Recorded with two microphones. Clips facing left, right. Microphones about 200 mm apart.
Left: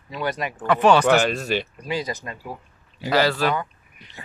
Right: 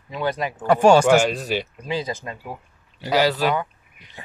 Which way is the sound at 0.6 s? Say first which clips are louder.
Right 3 dB; 45° right (ahead or behind).